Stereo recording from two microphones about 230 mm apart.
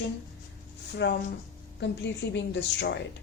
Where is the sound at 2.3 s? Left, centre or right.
Left.